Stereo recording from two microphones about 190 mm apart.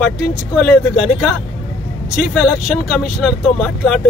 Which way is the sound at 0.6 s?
10° left (ahead or behind).